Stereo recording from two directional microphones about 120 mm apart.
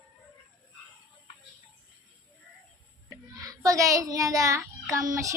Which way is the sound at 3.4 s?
30° right (ahead or behind).